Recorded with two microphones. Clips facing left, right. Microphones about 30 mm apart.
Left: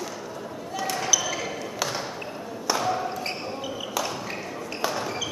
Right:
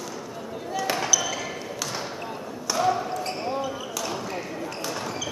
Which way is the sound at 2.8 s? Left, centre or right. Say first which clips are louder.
Right 7 dB; centre.